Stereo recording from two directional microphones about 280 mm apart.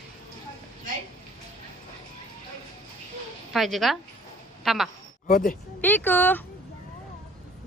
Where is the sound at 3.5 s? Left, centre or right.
Centre.